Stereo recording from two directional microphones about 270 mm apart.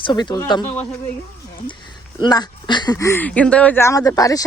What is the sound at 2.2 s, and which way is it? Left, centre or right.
Speech, centre.